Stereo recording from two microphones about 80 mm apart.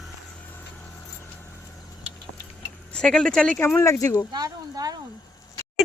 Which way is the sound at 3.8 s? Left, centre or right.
Left.